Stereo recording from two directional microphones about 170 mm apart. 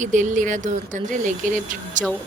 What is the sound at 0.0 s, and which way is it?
Speech, 45° right (ahead or behind).